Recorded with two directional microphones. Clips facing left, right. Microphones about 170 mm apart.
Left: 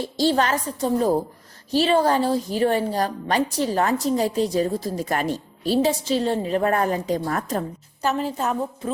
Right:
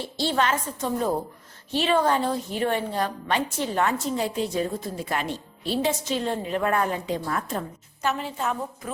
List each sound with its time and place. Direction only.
0.2 s a woman's voice: 40° left (ahead or behind)